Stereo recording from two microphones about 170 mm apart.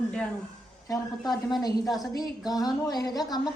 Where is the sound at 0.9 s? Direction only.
25° left (ahead or behind).